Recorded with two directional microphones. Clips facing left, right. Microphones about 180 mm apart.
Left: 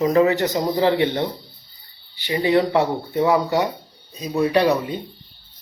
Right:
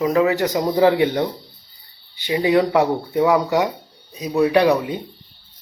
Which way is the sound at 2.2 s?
15° right (ahead or behind).